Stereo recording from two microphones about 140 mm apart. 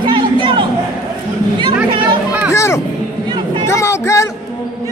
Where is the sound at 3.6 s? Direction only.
20° left (ahead or behind).